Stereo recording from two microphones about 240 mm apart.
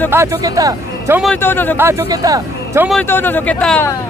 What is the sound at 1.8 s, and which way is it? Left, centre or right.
Speech, centre.